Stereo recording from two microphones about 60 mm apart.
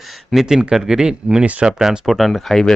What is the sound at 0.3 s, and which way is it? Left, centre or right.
Speech, centre.